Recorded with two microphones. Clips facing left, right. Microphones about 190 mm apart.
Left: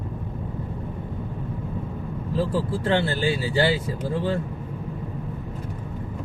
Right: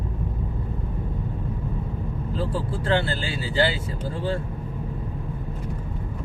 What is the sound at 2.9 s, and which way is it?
Speech, 25° left (ahead or behind).